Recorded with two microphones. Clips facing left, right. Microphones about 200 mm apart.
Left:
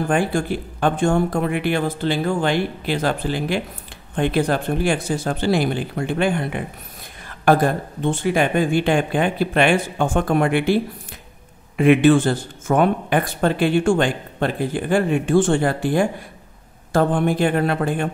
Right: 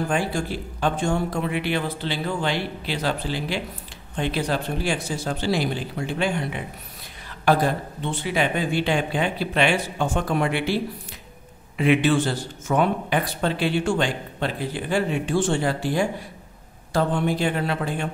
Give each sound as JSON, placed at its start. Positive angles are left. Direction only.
{"t": 0.1, "sound": "speech", "side_deg": 55}